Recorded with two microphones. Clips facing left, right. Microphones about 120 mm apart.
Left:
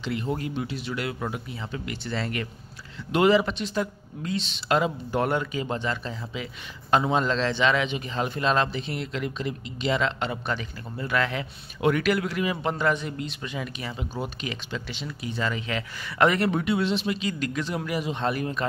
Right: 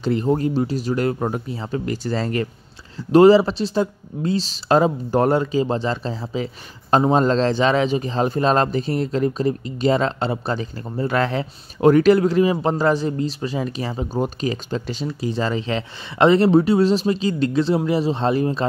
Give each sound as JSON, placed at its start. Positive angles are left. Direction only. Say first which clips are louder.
{"t": 0.0, "sound": "speech", "louder": "right 10 dB", "side_deg": -40}